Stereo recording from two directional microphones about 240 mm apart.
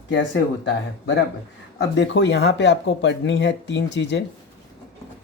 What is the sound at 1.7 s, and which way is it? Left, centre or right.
Speech, left.